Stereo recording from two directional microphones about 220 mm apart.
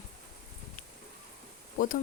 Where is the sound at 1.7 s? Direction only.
40° left (ahead or behind).